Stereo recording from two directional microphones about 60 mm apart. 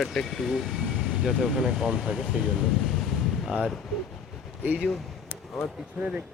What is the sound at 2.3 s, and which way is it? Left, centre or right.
Air conditioning, centre.